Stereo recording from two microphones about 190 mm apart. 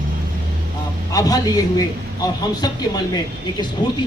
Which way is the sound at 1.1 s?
20° left (ahead or behind).